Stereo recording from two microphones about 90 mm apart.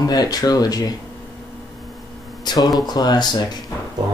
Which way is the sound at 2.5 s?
50° left (ahead or behind).